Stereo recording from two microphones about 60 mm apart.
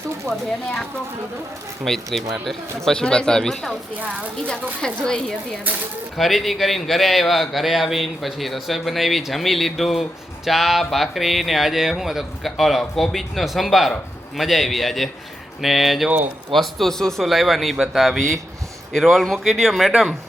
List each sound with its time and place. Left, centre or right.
0.3 s a man's voice: centre
2.9 s speech: centre
3.9 s a woman's voice: right
4.4 s speech: centre
6.1 s a man's voice: centre